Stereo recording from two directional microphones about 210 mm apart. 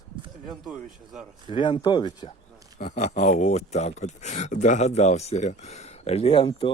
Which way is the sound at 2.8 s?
35° left (ahead or behind).